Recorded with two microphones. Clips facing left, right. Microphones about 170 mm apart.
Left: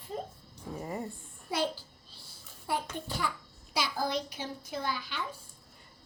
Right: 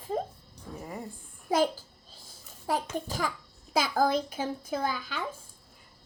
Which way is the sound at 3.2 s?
90° right.